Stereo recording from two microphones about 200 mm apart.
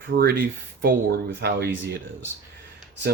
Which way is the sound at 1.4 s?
55° right (ahead or behind).